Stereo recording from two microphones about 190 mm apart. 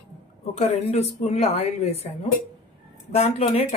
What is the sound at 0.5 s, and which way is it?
Speech, 35° left (ahead or behind).